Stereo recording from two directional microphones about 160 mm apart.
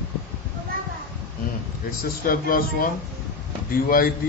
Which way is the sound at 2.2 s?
65° left (ahead or behind).